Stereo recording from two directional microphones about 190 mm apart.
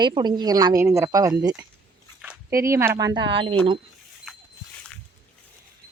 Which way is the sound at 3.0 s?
20° right (ahead or behind).